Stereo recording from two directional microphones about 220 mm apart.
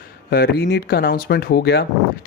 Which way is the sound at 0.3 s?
45° left (ahead or behind).